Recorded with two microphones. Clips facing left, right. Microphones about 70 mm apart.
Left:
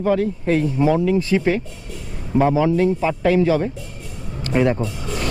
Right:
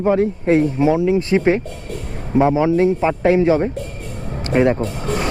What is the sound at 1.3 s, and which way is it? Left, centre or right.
Speech, right.